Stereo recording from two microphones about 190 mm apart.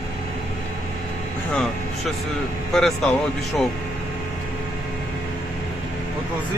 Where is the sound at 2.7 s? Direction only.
Centre (ahead or behind).